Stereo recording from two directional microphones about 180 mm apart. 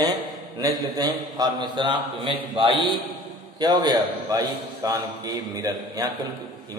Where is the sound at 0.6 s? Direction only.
20° right (ahead or behind).